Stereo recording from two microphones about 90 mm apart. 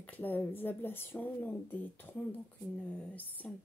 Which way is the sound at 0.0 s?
20° left (ahead or behind).